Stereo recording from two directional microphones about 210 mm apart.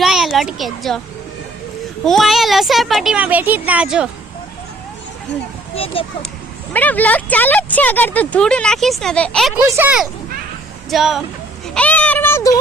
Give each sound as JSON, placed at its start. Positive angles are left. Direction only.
{"t": 0.0, "sound": "a child's voice", "side_deg": 0}
{"t": 2.0, "sound": "speech", "side_deg": 0}
{"t": 5.7, "sound": "speech", "side_deg": 25}
{"t": 6.7, "sound": "speech", "side_deg": 10}
{"t": 9.6, "sound": "speech", "side_deg": -10}
{"t": 11.7, "sound": "a sound", "side_deg": 5}